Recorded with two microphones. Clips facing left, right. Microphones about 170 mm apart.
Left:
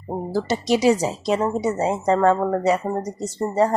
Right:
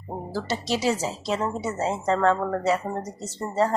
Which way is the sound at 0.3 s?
15° left (ahead or behind).